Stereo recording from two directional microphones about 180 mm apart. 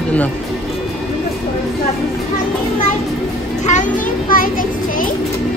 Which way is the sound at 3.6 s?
45° left (ahead or behind).